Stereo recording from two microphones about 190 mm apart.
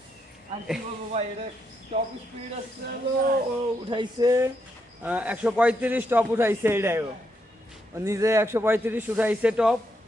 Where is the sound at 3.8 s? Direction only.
25° right (ahead or behind).